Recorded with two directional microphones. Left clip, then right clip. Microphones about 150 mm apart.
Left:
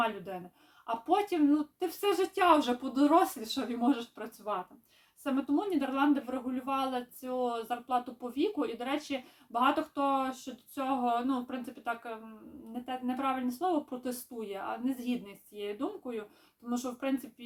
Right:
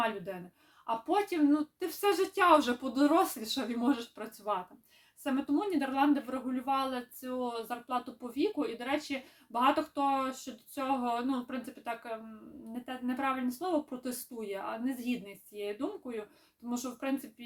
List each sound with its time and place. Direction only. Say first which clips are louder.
0.9 s speech: left 1 dB; 15° right (ahead or behind)